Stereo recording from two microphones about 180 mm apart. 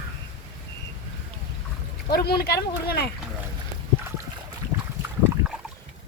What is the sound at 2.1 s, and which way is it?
Speech, 60° left (ahead or behind).